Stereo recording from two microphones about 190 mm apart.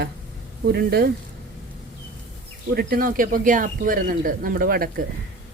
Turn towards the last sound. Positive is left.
turn(degrees=-50)  # may be behind; listen again after turning